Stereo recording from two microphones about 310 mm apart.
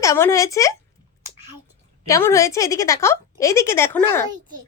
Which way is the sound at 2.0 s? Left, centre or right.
Centre.